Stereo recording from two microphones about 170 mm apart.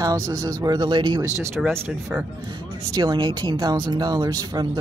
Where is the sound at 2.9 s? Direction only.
25° right (ahead or behind).